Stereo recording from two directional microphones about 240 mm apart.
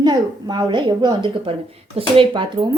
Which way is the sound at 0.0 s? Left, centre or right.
Centre.